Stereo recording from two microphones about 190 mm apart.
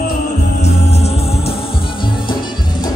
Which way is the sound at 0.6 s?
35° left (ahead or behind).